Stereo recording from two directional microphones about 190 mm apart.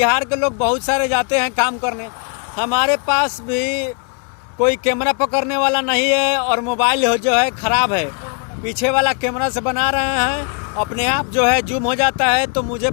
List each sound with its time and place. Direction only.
0.0 s speech: 5° right (ahead or behind)